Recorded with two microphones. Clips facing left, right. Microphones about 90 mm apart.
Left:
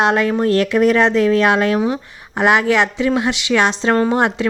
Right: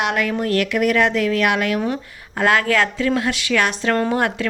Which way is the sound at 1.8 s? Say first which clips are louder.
Left 4 dB; 15° left (ahead or behind).